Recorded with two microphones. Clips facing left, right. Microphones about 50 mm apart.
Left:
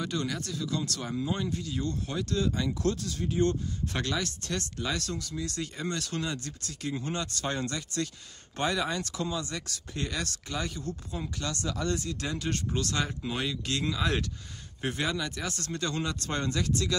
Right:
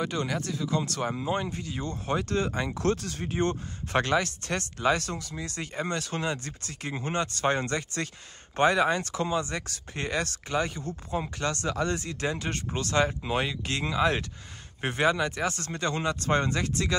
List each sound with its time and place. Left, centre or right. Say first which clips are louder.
0.0 s speech: right 3 dB; centre
2.1 s speech: right 3 dB; right